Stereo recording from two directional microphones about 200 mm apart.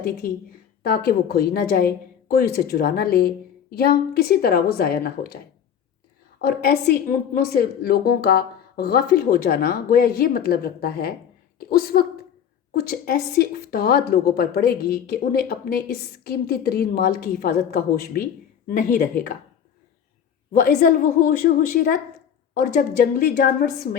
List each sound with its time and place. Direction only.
0.8 s a woman's voice: 50° left (ahead or behind)
6.4 s a woman's voice: 50° left (ahead or behind)
20.5 s a woman's voice: 45° left (ahead or behind)